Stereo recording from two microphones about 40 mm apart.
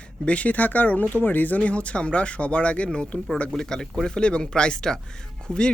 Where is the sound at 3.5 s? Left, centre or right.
Centre.